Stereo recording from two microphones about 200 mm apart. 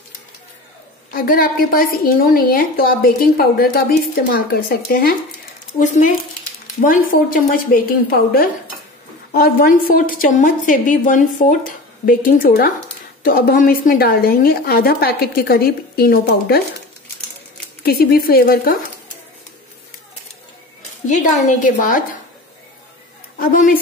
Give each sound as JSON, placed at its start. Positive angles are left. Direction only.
{"t": 1.1, "sound": "a woman's voice", "side_deg": 45}
{"t": 17.8, "sound": "a woman's voice", "side_deg": 50}
{"t": 21.1, "sound": "a woman's voice", "side_deg": 35}
{"t": 23.4, "sound": "a woman's voice", "side_deg": 45}